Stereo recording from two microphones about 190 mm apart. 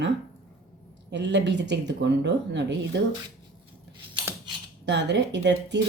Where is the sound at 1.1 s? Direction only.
70° right (ahead or behind).